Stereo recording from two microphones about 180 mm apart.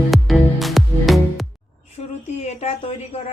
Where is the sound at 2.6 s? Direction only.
35° left (ahead or behind).